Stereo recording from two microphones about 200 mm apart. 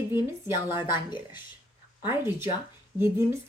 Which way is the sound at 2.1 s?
10° right (ahead or behind).